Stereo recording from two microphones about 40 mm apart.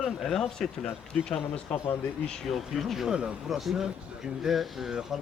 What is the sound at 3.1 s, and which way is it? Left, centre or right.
Speech, right.